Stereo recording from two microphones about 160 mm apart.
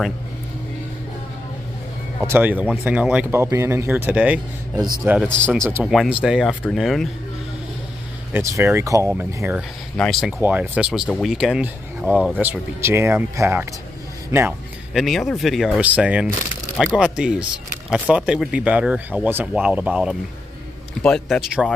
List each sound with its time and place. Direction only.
2.2 s speech: 10° right (ahead or behind)
4.7 s speech: 25° right (ahead or behind)
5.0 s speech: 10° right (ahead or behind)
8.3 s speech: 15° right (ahead or behind)
9.9 s speech: centre (ahead or behind)
10.4 s speech: 10° right (ahead or behind)
15.0 s speech: centre (ahead or behind)